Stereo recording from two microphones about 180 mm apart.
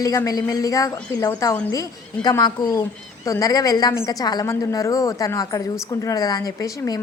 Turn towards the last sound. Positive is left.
turn(degrees=20)  # may be behind; listen again after turning